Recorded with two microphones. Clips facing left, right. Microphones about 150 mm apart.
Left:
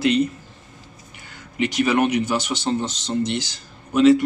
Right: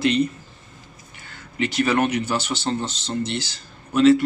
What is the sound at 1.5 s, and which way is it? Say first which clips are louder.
Speech: left 1 dB; 15° left (ahead or behind).